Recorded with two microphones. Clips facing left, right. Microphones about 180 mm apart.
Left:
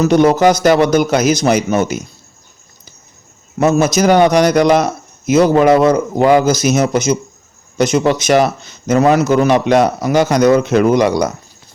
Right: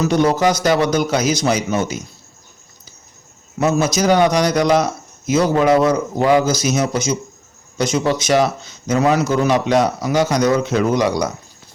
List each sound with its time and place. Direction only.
0.0 s a man's voice: 60° left (ahead or behind)
3.6 s a man's voice: 55° left (ahead or behind)